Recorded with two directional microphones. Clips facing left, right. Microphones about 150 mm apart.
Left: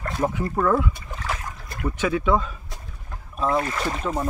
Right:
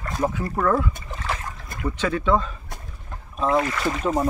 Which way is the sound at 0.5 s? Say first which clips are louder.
Left 1 dB; 5° left (ahead or behind).